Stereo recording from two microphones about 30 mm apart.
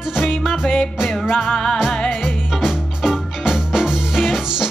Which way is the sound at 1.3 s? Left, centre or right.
Centre.